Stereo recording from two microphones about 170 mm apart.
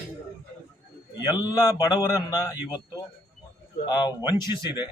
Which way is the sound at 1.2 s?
20° left (ahead or behind).